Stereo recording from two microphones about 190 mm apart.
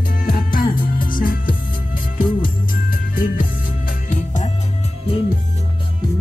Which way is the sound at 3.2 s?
45° left (ahead or behind).